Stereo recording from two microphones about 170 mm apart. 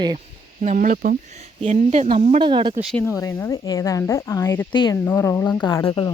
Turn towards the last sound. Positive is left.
turn(degrees=30)  # may be behind; listen again after turning